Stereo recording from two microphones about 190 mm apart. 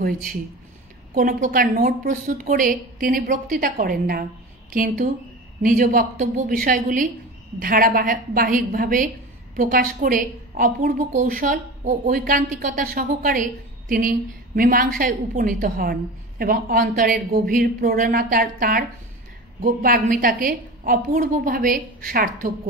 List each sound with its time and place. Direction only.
0.0 s a woman's voice: 45° right (ahead or behind)